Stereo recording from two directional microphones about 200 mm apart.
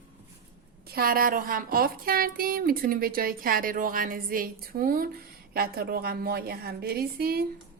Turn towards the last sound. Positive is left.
turn(degrees=-50)  # may be behind; listen again after turning